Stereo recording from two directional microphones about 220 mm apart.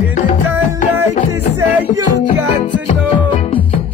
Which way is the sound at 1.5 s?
90° right.